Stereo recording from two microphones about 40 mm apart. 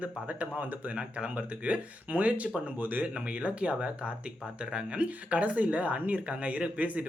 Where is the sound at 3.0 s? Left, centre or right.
Right.